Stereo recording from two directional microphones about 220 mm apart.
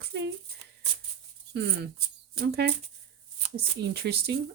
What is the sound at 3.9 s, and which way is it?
Speech, 45° right (ahead or behind).